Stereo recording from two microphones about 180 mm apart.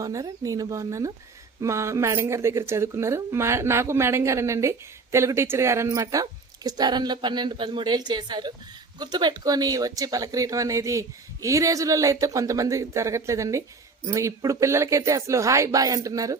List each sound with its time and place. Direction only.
0.0 s a woman's voice: 20° right (ahead or behind)